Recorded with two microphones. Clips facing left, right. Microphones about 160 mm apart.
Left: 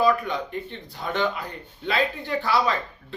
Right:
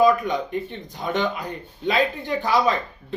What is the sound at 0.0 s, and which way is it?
Speech, 20° right (ahead or behind).